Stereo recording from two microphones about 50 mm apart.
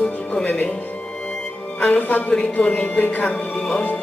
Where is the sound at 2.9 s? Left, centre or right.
Left.